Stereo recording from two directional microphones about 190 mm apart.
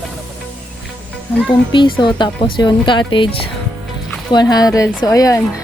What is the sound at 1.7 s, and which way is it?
Speech, 25° left (ahead or behind).